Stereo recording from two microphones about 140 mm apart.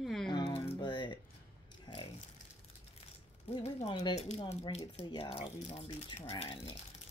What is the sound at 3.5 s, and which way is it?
Speech, 45° left (ahead or behind).